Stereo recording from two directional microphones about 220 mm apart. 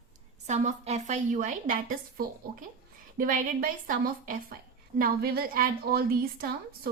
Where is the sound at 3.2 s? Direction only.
35° right (ahead or behind).